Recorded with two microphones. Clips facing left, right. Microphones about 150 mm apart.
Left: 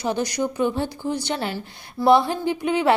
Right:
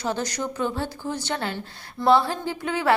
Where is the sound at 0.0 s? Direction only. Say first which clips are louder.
Left 4 dB; 10° left (ahead or behind).